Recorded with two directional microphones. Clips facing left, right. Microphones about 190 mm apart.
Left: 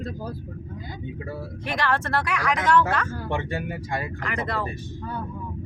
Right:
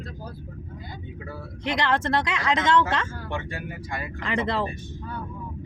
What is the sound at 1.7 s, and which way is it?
Speech, 20° right (ahead or behind).